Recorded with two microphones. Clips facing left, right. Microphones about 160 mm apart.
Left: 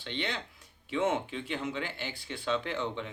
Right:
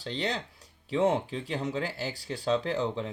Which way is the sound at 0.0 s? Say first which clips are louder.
Right 4 dB; 35° right (ahead or behind).